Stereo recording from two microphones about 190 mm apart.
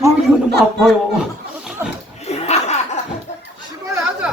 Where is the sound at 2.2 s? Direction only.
35° left (ahead or behind).